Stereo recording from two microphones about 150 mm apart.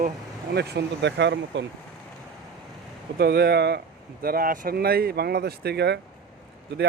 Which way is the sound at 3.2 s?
90° right.